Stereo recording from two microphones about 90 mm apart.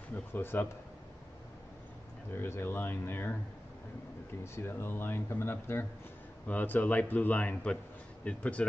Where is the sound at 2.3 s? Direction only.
25° left (ahead or behind).